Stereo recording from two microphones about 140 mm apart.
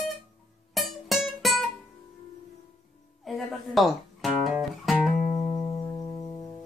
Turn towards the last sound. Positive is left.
turn(degrees=40)  # may be behind; listen again after turning